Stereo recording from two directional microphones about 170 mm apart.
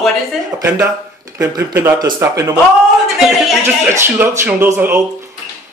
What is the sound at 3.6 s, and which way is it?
Speech, 15° right (ahead or behind).